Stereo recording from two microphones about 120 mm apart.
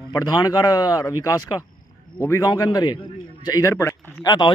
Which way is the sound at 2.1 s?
20° left (ahead or behind).